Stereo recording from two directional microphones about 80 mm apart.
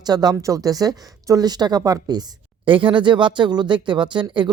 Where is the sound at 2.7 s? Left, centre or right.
Right.